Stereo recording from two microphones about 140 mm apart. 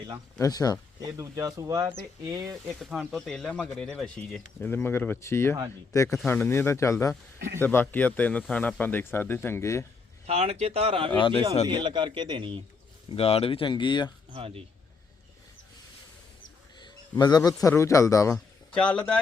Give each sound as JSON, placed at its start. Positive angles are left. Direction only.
{"t": 0.3, "sound": "speech", "side_deg": 25}
{"t": 1.1, "sound": "speech", "side_deg": -25}
{"t": 2.7, "sound": "speech", "side_deg": -5}
{"t": 10.2, "sound": "speech", "side_deg": -45}
{"t": 11.7, "sound": "speech", "side_deg": -35}
{"t": 13.1, "sound": "speech", "side_deg": 45}
{"t": 14.3, "sound": "speech", "side_deg": -45}
{"t": 16.7, "sound": "a man's voice", "side_deg": 30}
{"t": 18.7, "sound": "speech", "side_deg": 10}